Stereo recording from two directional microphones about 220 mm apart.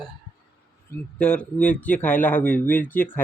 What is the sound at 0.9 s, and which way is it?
Speech, 5° left (ahead or behind).